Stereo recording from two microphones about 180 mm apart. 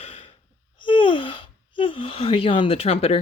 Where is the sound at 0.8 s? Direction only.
25° left (ahead or behind).